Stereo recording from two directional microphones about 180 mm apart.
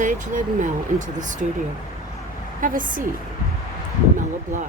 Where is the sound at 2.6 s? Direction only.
50° right (ahead or behind).